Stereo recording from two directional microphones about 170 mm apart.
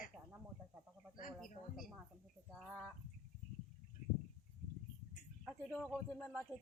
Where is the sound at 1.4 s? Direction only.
Centre (ahead or behind).